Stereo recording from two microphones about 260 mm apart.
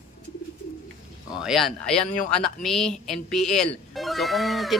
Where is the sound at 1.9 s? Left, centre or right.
Left.